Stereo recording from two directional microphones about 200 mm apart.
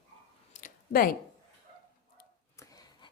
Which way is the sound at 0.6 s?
45° left (ahead or behind).